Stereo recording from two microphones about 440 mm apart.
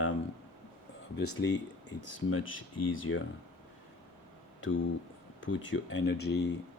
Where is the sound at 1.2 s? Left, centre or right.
Left.